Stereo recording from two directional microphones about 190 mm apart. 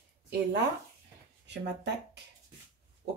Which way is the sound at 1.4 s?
65° right (ahead or behind).